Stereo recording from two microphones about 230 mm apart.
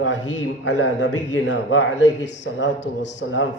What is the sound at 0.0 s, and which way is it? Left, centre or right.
A man's voice, left.